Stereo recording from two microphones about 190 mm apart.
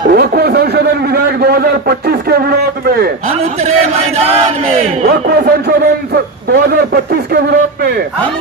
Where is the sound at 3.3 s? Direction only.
30° right (ahead or behind); by 8.0 s 55° right (ahead or behind).